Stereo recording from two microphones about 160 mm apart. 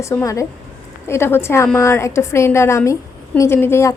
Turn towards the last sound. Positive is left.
turn(degrees=15)  # may be behind; listen again after turning